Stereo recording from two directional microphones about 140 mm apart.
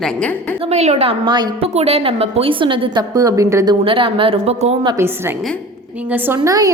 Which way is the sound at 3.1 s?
25° right (ahead or behind).